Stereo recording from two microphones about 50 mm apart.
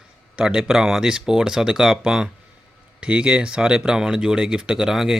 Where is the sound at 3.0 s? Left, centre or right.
Right.